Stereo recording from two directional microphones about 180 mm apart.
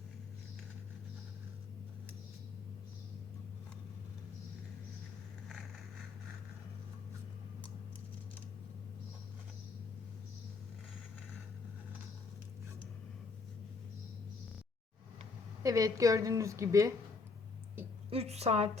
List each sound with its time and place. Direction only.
15.6 s a woman's voice: 20° right (ahead or behind)
17.8 s a sound: 10° right (ahead or behind)
18.1 s a woman's voice: 35° right (ahead or behind)